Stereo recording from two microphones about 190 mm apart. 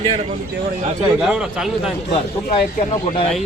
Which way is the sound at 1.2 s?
5° right (ahead or behind).